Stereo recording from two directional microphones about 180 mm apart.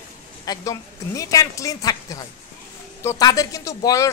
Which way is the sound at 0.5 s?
20° left (ahead or behind).